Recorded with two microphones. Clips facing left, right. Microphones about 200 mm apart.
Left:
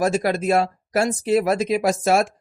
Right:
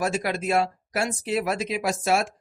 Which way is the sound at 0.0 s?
40° left (ahead or behind).